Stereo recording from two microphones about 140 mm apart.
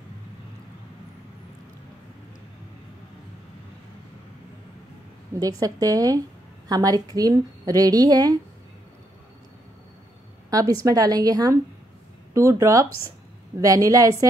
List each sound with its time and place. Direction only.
5.4 s a woman's voice: 25° right (ahead or behind)
10.5 s a woman's voice: 25° right (ahead or behind)